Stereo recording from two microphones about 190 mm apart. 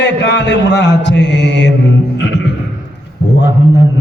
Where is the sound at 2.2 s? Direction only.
65° left (ahead or behind).